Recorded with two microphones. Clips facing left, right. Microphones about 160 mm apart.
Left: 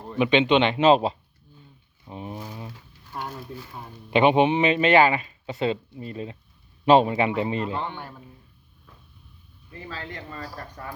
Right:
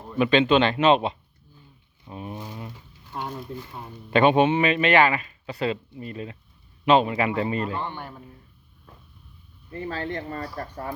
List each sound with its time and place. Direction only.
0.2 s speech: 20° left (ahead or behind)
2.0 s speech: 15° left (ahead or behind)
2.3 s a sound: 5° left (ahead or behind)
2.6 s a sound: 15° right (ahead or behind)
3.5 s speech: 15° right (ahead or behind)
4.1 s speech: 15° left (ahead or behind)
9.6 s speech: 40° right (ahead or behind)